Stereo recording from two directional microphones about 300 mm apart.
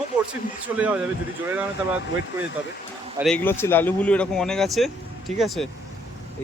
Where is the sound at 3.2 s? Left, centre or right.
Centre.